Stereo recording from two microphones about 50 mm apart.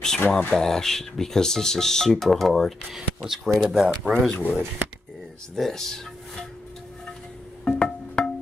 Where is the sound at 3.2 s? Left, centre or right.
Centre.